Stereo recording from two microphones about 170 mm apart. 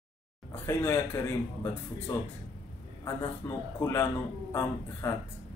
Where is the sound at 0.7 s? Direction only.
15° left (ahead or behind).